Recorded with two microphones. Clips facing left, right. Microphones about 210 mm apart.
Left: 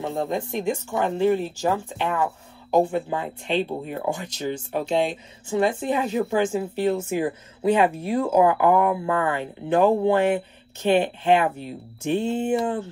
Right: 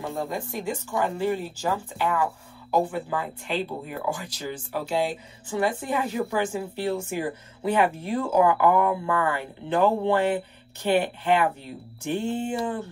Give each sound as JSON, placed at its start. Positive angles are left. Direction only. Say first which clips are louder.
{"t": 0.0, "sound": "speech", "louder": "left 4 dB", "side_deg": 20}